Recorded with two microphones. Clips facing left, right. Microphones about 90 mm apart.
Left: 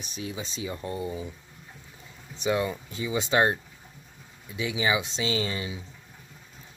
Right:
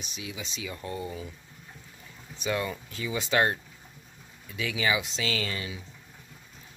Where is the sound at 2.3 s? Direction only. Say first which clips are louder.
Left 4 dB; 20° left (ahead or behind).